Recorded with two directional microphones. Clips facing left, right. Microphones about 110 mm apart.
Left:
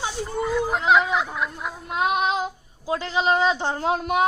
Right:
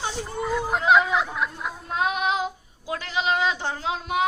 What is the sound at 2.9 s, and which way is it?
Speech, 35° left (ahead or behind).